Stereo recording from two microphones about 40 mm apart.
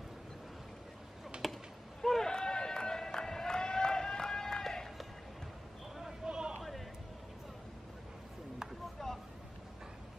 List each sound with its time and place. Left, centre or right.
1.3 s computer keyboard: right
2.0 s run: centre
6.2 s a sound: right
9.0 s boat: centre